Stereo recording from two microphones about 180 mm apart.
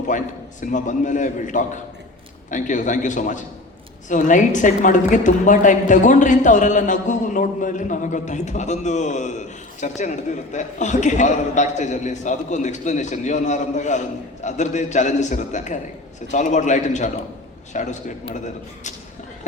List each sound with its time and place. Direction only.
0.6 s a woman's voice: 45° left (ahead or behind)